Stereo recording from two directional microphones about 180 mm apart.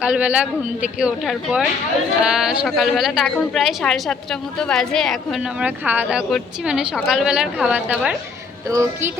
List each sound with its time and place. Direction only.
0.0 s a woman's voice: 5° right (ahead or behind)